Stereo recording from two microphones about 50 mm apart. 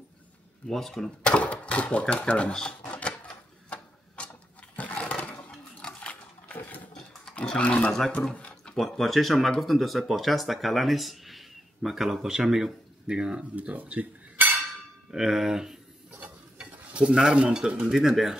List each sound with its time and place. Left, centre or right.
0.7 s speech: centre
1.2 s speech: left
2.8 s typewriter: left
4.7 s a sound: left
5.8 s a sound: centre
6.0 s pig: left
7.3 s speech: left
8.4 s a sound: left
8.7 s speech: centre
13.6 s cutlery: right
15.0 s speech: centre
16.5 s stir: centre
17.8 s speech: centre